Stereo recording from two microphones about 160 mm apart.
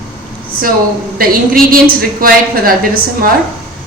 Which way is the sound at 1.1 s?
65° right (ahead or behind).